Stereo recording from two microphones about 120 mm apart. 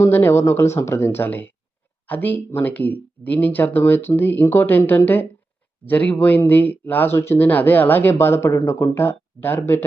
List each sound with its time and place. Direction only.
0.0 s speech: 20° left (ahead or behind)